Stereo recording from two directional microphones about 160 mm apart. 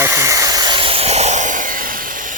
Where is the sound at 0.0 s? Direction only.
20° right (ahead or behind).